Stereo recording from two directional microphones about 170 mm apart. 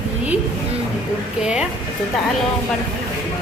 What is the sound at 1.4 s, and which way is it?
Speech, 5° right (ahead or behind).